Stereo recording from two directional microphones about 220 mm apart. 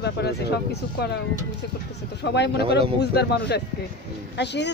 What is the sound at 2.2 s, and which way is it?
A woman's voice, 50° left (ahead or behind).